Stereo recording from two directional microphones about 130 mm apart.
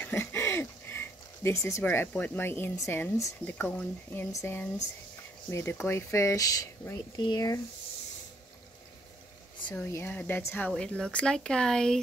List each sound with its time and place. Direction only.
0.0 s speech: 20° left (ahead or behind)
7.2 s speech: 35° left (ahead or behind)
9.8 s speech: 15° left (ahead or behind)